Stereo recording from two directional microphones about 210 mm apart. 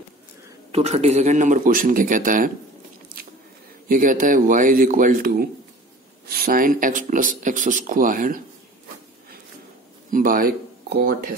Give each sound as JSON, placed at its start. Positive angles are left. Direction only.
{"t": 0.7, "sound": "speech", "side_deg": -30}
{"t": 3.9, "sound": "speech", "side_deg": -40}
{"t": 10.1, "sound": "speech", "side_deg": -40}